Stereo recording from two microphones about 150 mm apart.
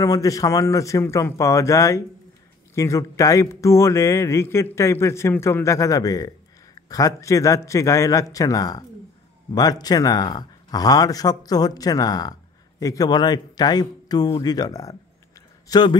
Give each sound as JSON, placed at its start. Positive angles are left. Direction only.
{"t": 0.0, "sound": "speech", "side_deg": 25}